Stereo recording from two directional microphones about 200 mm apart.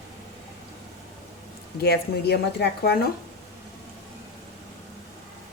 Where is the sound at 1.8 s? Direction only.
55° left (ahead or behind).